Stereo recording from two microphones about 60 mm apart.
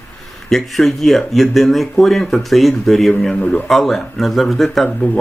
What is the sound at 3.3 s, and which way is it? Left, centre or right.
Speech, left.